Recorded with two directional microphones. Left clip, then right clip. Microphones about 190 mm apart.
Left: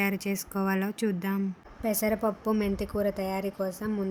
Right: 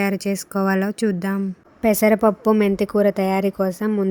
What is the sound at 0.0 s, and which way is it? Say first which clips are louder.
Speech: right 7 dB; 25° right (ahead or behind).